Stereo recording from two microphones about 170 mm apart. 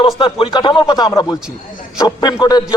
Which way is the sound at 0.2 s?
30° left (ahead or behind).